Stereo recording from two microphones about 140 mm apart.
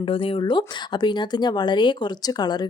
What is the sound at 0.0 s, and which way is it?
Speech, 40° left (ahead or behind).